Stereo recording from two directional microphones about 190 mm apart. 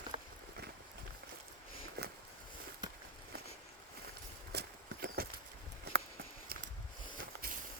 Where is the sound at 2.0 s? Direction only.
55° right (ahead or behind).